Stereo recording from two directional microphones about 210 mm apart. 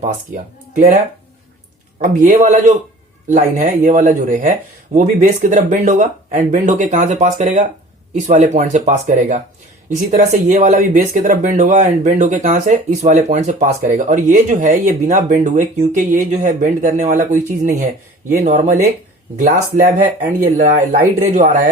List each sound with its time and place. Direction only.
0.7 s speech: 35° right (ahead or behind)
2.1 s speech: 40° right (ahead or behind)